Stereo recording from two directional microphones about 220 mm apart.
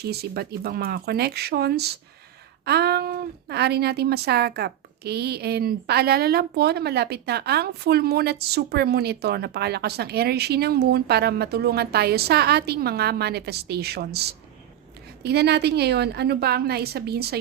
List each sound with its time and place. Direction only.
0.0 s speech: 45° right (ahead or behind)